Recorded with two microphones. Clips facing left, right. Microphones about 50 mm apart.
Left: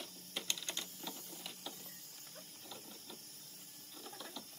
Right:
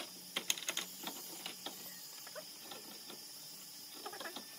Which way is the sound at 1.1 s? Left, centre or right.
Right.